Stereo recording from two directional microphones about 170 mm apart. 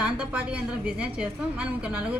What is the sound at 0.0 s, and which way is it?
A woman's voice, 5° right (ahead or behind).